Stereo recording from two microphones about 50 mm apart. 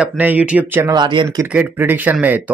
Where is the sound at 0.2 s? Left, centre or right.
Right.